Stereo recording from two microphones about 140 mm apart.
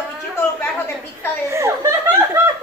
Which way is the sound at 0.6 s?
15° left (ahead or behind).